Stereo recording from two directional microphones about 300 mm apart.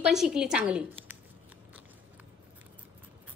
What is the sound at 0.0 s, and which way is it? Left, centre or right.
A woman's voice, centre.